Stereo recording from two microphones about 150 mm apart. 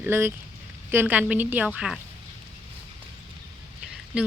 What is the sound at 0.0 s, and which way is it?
A woman's voice, 15° right (ahead or behind).